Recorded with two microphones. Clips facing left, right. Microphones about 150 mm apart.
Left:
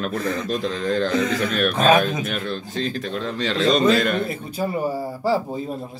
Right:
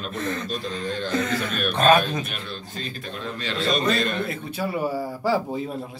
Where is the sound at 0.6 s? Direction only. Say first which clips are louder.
Left 7 dB; 75° left (ahead or behind).